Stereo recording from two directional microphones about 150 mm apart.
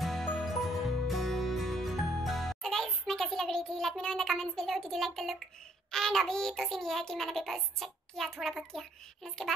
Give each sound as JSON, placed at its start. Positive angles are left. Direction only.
{"t": 0.0, "sound": "music", "side_deg": 0}
{"t": 5.9, "sound": "child singing", "side_deg": 5}